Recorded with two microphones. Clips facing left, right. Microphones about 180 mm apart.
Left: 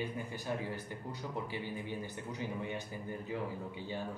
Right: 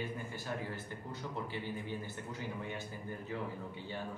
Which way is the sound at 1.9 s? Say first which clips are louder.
Left 1 dB; 15° left (ahead or behind).